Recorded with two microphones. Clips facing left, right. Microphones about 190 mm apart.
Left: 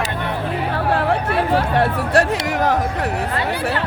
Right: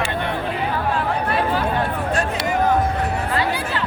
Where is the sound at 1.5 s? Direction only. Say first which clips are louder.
Left 4 dB; 80° left.